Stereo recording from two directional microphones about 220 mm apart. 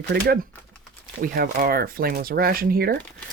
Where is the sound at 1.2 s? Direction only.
40° right (ahead or behind).